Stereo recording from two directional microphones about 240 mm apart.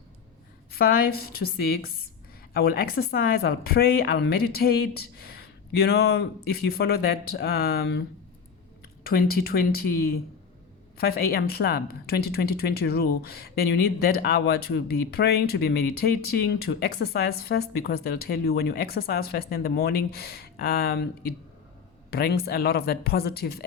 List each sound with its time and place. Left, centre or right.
0.7 s speech: left
9.0 s speech: left
10.9 s speech: left
22.1 s speech: left